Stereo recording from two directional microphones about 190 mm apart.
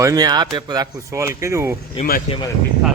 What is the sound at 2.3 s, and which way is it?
Speech, 35° left (ahead or behind).